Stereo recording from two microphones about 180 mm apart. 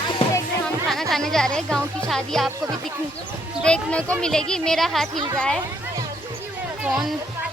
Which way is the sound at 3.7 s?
5° left (ahead or behind).